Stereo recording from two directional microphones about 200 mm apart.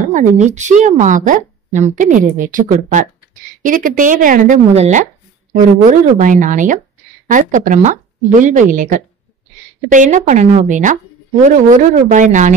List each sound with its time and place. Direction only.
0.1 s a woman's voice: 35° right (ahead or behind)